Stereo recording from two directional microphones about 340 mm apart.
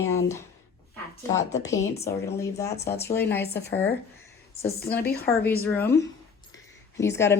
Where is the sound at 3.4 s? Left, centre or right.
Left.